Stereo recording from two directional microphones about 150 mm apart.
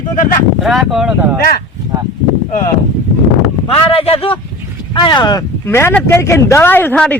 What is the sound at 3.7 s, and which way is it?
Speech, 40° left (ahead or behind).